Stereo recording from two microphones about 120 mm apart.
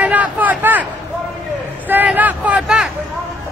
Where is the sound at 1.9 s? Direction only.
15° right (ahead or behind).